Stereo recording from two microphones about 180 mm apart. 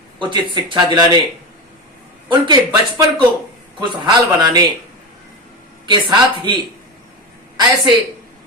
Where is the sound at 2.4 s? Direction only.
25° right (ahead or behind).